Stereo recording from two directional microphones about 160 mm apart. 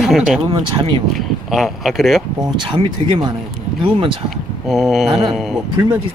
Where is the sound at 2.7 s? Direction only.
30° right (ahead or behind).